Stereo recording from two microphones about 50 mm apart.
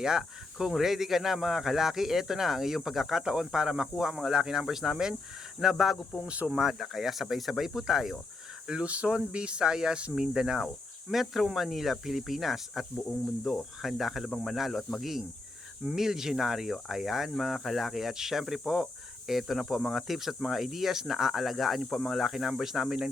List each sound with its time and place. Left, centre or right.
0.0 s speech: centre
8.6 s speech: centre
16.0 s speech: centre